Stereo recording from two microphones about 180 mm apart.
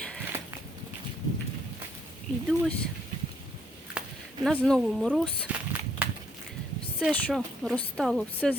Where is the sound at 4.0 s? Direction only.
5° right (ahead or behind).